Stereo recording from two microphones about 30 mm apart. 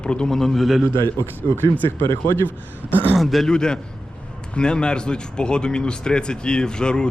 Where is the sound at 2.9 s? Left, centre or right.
Left.